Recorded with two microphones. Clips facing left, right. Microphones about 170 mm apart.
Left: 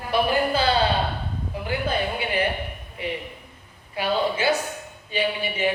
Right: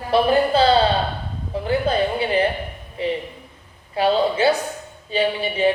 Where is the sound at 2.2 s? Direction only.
30° right (ahead or behind).